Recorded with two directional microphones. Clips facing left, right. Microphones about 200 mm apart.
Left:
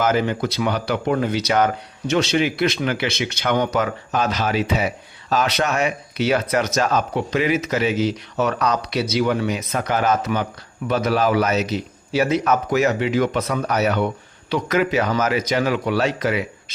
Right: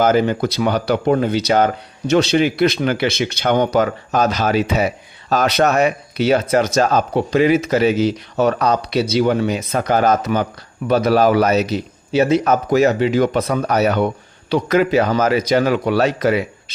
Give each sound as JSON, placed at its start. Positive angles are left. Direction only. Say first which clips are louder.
{"t": 0.0, "sound": "speech", "louder": "right 5 dB", "side_deg": -35}
{"t": 12.1, "sound": "speech", "louder": "right 4 dB", "side_deg": -25}